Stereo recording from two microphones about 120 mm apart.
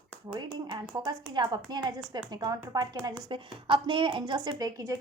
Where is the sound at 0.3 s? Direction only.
40° right (ahead or behind).